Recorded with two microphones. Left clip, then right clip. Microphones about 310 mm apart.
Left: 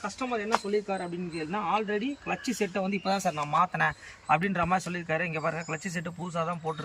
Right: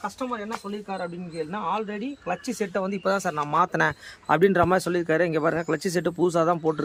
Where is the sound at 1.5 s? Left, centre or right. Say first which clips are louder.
Left 1 dB; centre.